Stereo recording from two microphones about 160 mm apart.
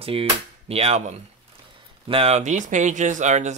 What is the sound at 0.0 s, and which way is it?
Speech, 35° right (ahead or behind).